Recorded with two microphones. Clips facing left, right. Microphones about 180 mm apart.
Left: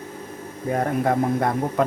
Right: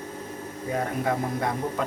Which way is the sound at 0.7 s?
50° left (ahead or behind).